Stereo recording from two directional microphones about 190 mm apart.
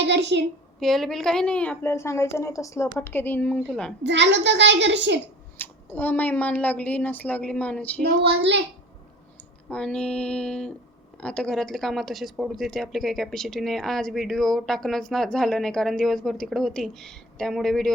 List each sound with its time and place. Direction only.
0.0 s a woman's voice: 65° right (ahead or behind)
0.8 s a woman's voice: centre (ahead or behind)
4.0 s a child's voice: 65° right (ahead or behind)
5.5 s a woman's voice: 10° left (ahead or behind)
8.2 s a child's voice: 65° right (ahead or behind)
9.6 s a woman's voice: 5° left (ahead or behind)